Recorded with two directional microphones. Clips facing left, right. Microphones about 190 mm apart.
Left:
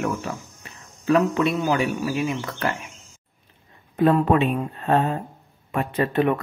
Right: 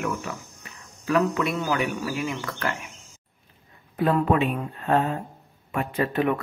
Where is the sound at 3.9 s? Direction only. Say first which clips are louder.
Left 4 dB; 35° left (ahead or behind).